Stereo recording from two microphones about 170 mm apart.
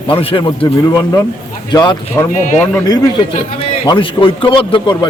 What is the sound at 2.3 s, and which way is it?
Speech, 50° left (ahead or behind).